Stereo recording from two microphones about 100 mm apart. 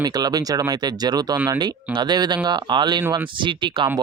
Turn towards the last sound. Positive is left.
turn(degrees=-55)  # may be behind; listen again after turning